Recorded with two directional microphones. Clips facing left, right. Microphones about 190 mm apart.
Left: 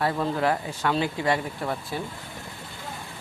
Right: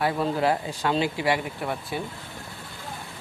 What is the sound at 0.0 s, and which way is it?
Speech, 10° right (ahead or behind).